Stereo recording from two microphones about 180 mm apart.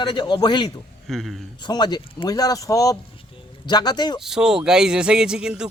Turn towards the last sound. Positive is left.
turn(degrees=-5)  # may be behind; listen again after turning